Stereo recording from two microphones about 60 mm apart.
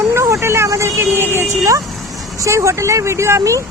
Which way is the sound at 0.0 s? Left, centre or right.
Right.